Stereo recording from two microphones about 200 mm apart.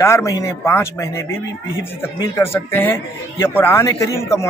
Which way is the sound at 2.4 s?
10° left (ahead or behind).